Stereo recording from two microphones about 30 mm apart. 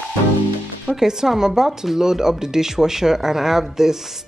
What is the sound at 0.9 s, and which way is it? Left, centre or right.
Speech, centre.